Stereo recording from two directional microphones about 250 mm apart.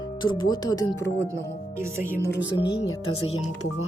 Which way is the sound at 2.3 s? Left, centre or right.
Left.